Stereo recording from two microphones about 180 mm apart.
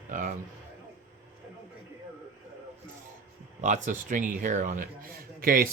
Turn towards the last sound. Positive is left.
turn(degrees=-55)  # may be behind; listen again after turning